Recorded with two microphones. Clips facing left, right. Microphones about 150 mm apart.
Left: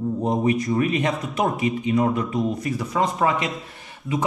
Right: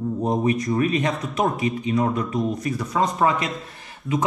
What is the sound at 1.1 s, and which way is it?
Speech, centre (ahead or behind).